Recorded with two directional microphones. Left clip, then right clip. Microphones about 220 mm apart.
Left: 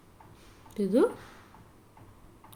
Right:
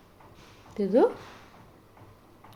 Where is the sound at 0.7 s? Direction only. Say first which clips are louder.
Right 3 dB; 45° left (ahead or behind).